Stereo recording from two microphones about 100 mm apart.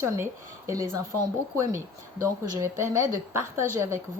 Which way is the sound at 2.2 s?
25° right (ahead or behind).